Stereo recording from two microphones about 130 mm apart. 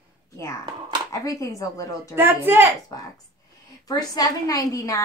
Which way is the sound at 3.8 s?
30° left (ahead or behind).